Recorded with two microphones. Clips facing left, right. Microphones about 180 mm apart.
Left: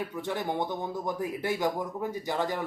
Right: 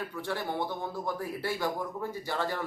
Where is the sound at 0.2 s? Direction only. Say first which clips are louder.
Left 2 dB; 20° left (ahead or behind).